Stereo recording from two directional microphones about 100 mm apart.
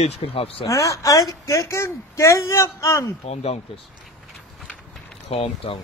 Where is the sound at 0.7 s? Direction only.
30° left (ahead or behind).